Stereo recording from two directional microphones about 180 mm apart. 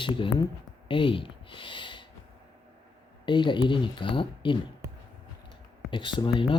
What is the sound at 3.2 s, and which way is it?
Speech, 25° left (ahead or behind).